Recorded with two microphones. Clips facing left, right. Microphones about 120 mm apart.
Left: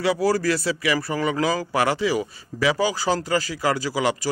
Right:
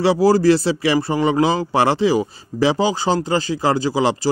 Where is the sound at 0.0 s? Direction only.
30° right (ahead or behind).